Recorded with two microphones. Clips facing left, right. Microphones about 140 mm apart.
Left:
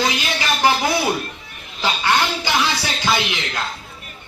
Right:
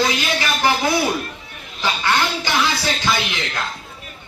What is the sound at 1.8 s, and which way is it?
A man's voice, 15° left (ahead or behind).